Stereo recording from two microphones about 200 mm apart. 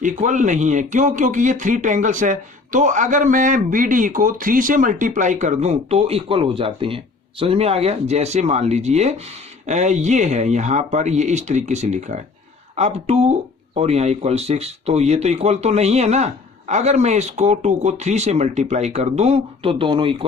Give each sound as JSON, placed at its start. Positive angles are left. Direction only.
{"t": 0.0, "sound": "speech", "side_deg": -40}